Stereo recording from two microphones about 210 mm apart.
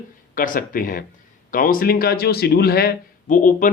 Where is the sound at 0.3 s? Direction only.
40° left (ahead or behind).